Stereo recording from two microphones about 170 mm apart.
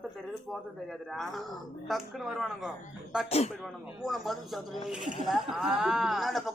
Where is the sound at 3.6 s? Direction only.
Centre (ahead or behind).